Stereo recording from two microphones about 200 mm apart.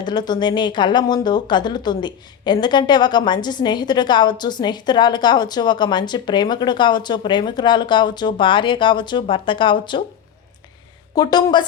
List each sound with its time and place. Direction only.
0.0 s speech: 20° left (ahead or behind)
11.1 s speech: 20° left (ahead or behind)